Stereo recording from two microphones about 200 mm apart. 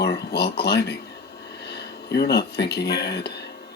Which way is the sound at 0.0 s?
55° left (ahead or behind).